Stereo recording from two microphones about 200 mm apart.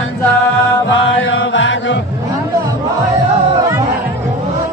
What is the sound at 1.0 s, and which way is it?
Chant, 75° left (ahead or behind).